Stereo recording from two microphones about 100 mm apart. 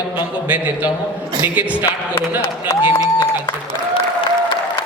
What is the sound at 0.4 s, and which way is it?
A man's voice, 15° right (ahead or behind).